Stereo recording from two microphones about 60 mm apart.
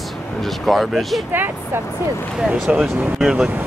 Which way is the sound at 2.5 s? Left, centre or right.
Centre.